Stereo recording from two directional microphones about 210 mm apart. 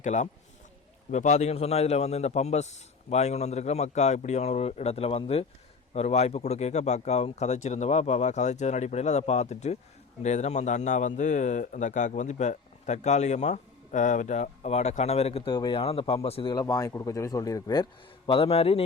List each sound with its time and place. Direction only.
0.0 s speech: 35° left (ahead or behind); by 17.8 s 15° left (ahead or behind)
18.3 s a man's voice: 30° left (ahead or behind)